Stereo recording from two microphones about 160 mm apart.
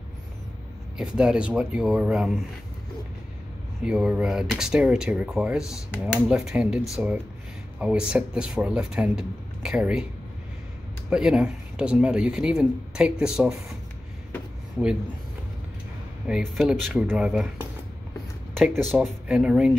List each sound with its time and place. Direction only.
0.9 s speech: 5° right (ahead or behind)
3.8 s speech: 5° right (ahead or behind)
7.8 s speech: 5° right (ahead or behind)
11.1 s speech: 5° right (ahead or behind)
16.3 s speech: 5° right (ahead or behind)